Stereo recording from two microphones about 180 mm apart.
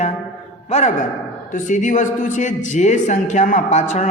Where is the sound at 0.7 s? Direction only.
40° left (ahead or behind).